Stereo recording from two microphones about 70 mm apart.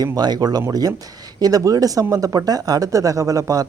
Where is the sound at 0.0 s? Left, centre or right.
Right.